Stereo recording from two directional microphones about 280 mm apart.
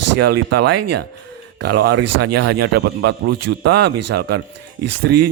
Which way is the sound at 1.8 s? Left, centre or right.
Right.